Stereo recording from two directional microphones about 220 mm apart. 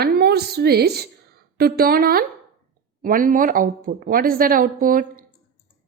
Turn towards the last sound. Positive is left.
turn(degrees=-40)  # may be behind; listen again after turning